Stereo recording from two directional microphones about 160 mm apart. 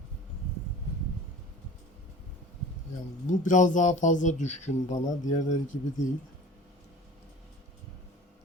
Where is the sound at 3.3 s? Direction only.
50° left (ahead or behind).